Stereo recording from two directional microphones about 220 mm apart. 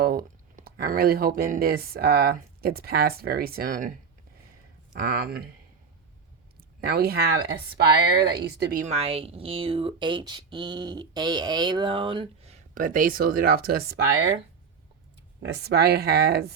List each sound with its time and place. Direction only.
0.0 s speech: 40° right (ahead or behind)
4.9 s speech: 45° right (ahead or behind)
6.8 s a woman's voice: 45° right (ahead or behind)
15.4 s speech: 50° right (ahead or behind)